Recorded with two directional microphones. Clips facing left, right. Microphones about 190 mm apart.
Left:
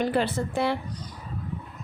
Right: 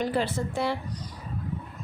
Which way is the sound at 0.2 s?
60° left (ahead or behind).